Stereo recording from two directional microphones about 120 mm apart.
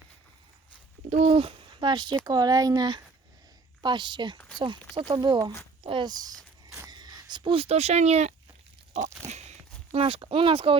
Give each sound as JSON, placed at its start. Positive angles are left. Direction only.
{"t": 1.1, "sound": "a child's voice", "side_deg": -55}
{"t": 9.2, "sound": "walk", "side_deg": -65}